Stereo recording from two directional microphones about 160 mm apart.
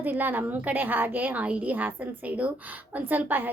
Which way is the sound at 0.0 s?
10° right (ahead or behind).